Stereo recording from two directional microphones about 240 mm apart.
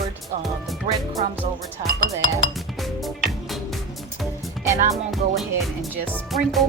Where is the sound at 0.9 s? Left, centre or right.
Right.